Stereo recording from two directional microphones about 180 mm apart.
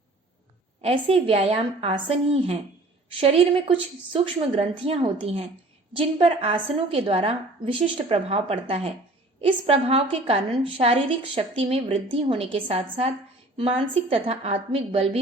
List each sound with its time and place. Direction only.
0.8 s a woman's voice: 35° right (ahead or behind)